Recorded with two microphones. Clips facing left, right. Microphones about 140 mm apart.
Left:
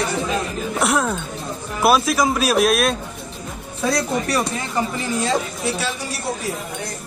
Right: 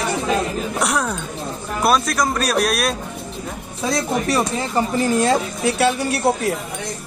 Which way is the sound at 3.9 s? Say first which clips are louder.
Right 1 dB; 25° right (ahead or behind).